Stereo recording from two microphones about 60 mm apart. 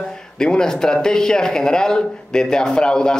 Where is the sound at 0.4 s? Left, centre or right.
Centre.